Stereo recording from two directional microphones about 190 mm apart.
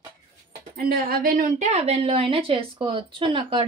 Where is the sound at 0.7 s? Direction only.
50° right (ahead or behind).